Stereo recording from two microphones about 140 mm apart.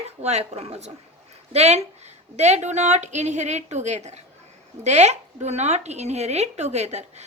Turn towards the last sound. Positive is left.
turn(degrees=-50)  # may be behind; listen again after turning